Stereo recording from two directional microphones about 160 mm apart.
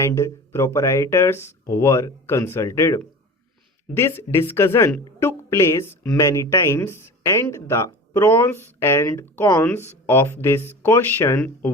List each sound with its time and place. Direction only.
0.0 s speech: 15° left (ahead or behind)